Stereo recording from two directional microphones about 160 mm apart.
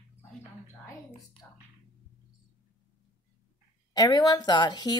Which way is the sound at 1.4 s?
10° left (ahead or behind).